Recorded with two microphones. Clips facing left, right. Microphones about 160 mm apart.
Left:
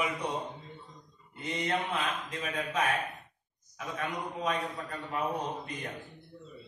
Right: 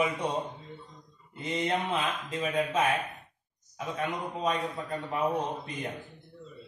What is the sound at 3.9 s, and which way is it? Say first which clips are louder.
A man's voice: right 2 dB; 25° right (ahead or behind).